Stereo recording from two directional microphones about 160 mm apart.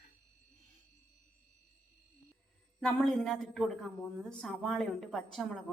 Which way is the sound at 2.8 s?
Centre (ahead or behind).